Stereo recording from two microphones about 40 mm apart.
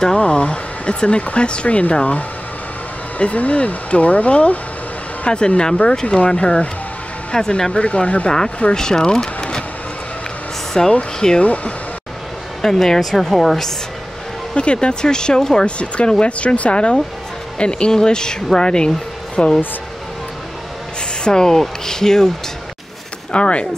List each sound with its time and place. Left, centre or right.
0.2 s speech: left
3.2 s speech: left
5.2 s speech: left
7.3 s a woman's voice: centre
7.8 s speech: left
8.7 s speech: centre
10.7 s a woman's voice: centre
11.4 s speech: left
12.6 s a woman's voice: centre
14.5 s speech: left
21.2 s a woman's voice: centre
23.3 s speech: left